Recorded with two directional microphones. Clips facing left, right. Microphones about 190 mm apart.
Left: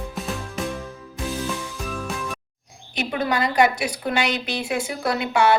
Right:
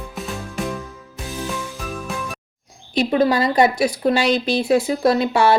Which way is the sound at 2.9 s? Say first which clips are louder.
Right 7 dB; 35° right (ahead or behind).